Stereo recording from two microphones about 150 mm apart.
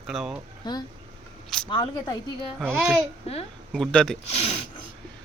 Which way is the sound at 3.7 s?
5° left (ahead or behind).